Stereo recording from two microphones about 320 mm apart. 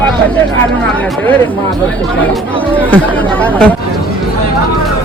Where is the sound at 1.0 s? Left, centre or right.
Centre.